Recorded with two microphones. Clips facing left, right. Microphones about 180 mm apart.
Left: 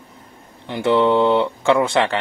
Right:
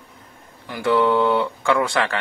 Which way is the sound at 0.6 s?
25° left (ahead or behind).